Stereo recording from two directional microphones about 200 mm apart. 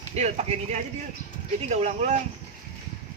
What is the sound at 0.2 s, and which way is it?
Speech, 35° right (ahead or behind).